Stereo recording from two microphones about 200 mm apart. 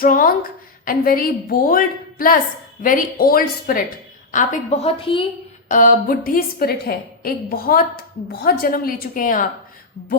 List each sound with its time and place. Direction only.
0.0 s a woman's voice: 45° left (ahead or behind); by 5.2 s 25° left (ahead or behind)
5.6 s a woman's voice: 40° left (ahead or behind)